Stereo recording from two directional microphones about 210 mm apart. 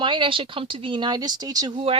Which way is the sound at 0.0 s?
25° right (ahead or behind).